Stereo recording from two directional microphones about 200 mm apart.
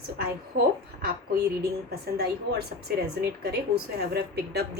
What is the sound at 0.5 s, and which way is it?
A woman's voice, 50° right (ahead or behind).